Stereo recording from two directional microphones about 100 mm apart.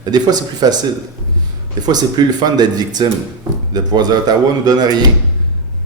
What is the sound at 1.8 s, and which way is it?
A man's voice, 40° right (ahead or behind).